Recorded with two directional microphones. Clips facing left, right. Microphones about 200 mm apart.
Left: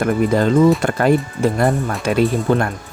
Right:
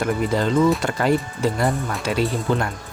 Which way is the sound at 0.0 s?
50° left (ahead or behind).